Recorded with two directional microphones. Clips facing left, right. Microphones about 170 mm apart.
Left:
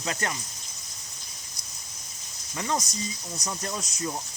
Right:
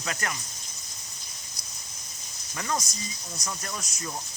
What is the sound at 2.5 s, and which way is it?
Speech, 20° left (ahead or behind).